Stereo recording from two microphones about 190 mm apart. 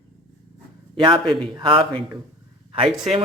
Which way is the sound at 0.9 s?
25° right (ahead or behind).